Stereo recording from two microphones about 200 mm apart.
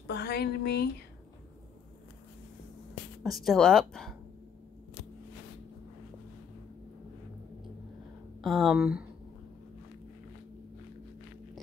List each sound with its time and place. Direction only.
0.0 s speech: 55° left (ahead or behind)
3.3 s speech: centre (ahead or behind)
8.4 s speech: centre (ahead or behind)